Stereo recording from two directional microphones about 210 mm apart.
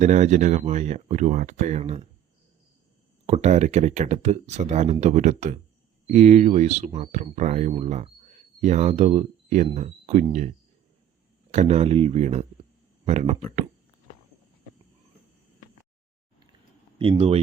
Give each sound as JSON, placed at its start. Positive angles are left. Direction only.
{"t": 0.0, "sound": "speech", "side_deg": -35}
{"t": 3.2, "sound": "speech", "side_deg": -30}
{"t": 11.5, "sound": "speech", "side_deg": -30}
{"t": 17.0, "sound": "speech", "side_deg": -25}